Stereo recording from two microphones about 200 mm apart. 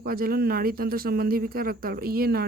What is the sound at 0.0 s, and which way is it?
Speech, 50° right (ahead or behind).